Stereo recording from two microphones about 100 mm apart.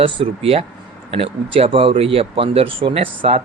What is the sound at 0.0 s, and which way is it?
Speech, 70° right (ahead or behind).